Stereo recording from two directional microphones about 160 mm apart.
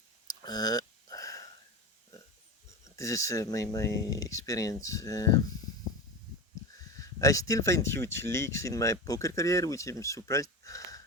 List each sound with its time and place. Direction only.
0.3 s a sound: 25° left (ahead or behind)
2.8 s speech: 20° left (ahead or behind)
6.7 s speech: 20° left (ahead or behind)